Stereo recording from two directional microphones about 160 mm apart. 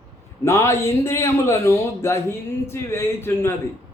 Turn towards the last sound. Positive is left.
turn(degrees=15)  # may be behind; listen again after turning